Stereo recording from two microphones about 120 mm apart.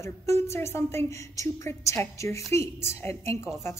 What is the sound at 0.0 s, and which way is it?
A woman's voice, 25° left (ahead or behind).